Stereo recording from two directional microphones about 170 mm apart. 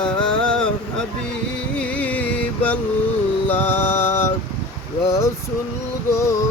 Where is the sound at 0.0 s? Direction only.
5° left (ahead or behind).